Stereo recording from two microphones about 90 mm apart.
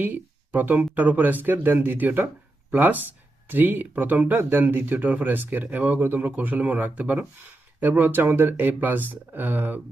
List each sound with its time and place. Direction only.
0.0 s speech: 20° right (ahead or behind)